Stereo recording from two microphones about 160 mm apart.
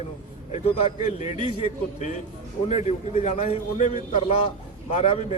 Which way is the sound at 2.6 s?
45° left (ahead or behind).